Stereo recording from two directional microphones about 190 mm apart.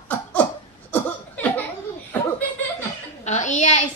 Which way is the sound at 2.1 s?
10° left (ahead or behind).